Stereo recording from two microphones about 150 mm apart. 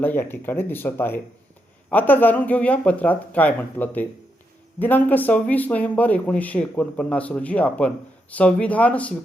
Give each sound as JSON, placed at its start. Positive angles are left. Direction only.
{"t": 0.0, "sound": "a man's voice", "side_deg": 15}